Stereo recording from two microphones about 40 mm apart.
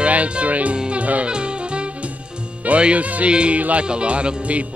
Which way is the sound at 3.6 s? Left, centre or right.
Right.